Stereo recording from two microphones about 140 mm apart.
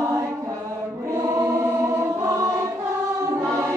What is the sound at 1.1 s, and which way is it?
Choir, 20° right (ahead or behind).